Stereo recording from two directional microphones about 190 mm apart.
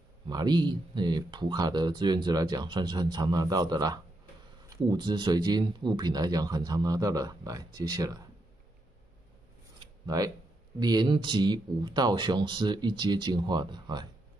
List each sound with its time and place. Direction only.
0.3 s speech: 20° right (ahead or behind)
9.8 s a sound: 20° right (ahead or behind)
10.8 s speech: 20° right (ahead or behind)